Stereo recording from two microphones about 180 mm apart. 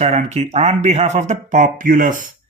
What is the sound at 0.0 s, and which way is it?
Speech, 40° right (ahead or behind).